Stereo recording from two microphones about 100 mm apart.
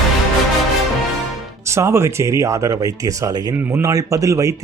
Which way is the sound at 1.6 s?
30° right (ahead or behind).